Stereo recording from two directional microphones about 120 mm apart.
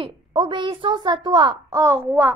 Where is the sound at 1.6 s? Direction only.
25° right (ahead or behind).